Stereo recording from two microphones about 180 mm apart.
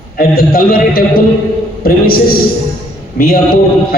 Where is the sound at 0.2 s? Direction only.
55° left (ahead or behind).